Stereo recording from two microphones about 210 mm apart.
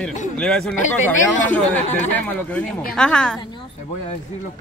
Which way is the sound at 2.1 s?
5° left (ahead or behind).